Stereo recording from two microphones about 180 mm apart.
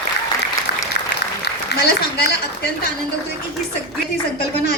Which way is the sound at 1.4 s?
65° left (ahead or behind).